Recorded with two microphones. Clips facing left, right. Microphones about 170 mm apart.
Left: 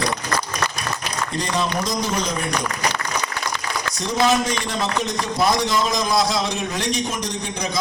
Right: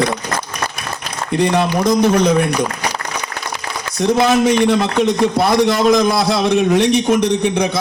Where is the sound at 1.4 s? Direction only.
60° right (ahead or behind).